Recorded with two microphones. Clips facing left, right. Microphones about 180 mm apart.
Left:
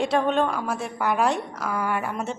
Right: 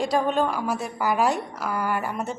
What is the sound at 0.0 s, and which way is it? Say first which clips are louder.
A woman's voice: left 1 dB; centre (ahead or behind).